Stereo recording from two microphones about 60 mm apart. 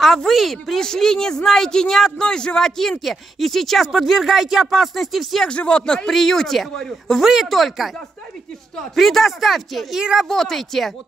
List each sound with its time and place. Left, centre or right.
0.0 s speech: centre
5.5 s speech: centre
8.9 s speech: centre